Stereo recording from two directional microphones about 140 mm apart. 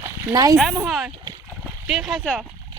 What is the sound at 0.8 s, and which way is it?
Speech, centre (ahead or behind).